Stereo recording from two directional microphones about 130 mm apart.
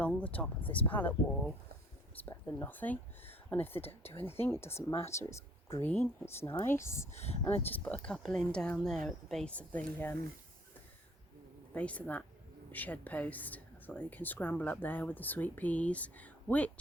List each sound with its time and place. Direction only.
0.0 s speech: 10° left (ahead or behind)
7.1 s speech: 55° left (ahead or behind)
7.9 s speech: 10° left (ahead or behind)
11.7 s speech: 10° left (ahead or behind)